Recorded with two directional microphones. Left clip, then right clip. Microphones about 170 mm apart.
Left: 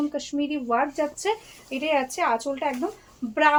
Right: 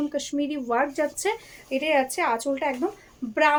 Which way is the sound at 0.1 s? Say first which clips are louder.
Even; 40° right (ahead or behind).